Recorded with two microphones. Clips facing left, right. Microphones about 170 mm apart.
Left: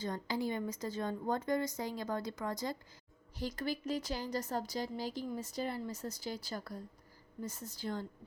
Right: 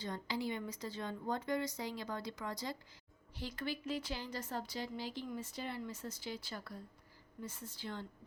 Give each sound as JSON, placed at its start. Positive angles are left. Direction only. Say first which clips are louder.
{"t": 0.0, "sound": "a woman's voice", "louder": "left 3 dB", "side_deg": 45}